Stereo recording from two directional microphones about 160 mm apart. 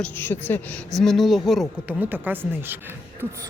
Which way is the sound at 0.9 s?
Centre (ahead or behind).